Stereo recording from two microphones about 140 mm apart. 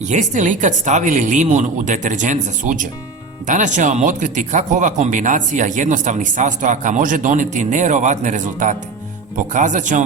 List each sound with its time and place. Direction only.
0.0 s speech: 60° right (ahead or behind)